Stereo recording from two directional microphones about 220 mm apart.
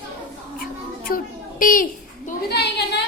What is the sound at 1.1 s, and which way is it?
Speech, 40° left (ahead or behind).